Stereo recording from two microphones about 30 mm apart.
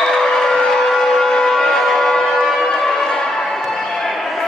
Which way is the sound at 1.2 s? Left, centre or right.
Left.